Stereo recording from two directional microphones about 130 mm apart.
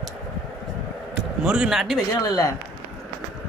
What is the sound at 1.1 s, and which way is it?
Speech, 5° right (ahead or behind).